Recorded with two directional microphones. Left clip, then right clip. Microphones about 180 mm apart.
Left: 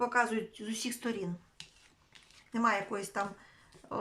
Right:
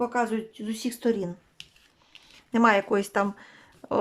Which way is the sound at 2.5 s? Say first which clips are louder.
Right 10 dB; 50° right (ahead or behind).